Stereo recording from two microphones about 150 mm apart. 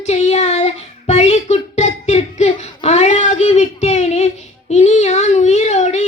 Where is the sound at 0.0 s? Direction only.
45° left (ahead or behind).